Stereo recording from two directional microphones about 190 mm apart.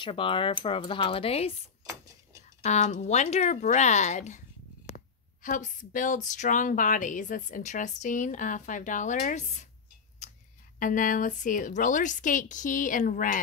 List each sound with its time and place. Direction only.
0.0 s speech: 25° left (ahead or behind)
2.6 s speech: 40° left (ahead or behind)
10.2 s a sound: 35° left (ahead or behind)
10.8 s speech: 45° left (ahead or behind)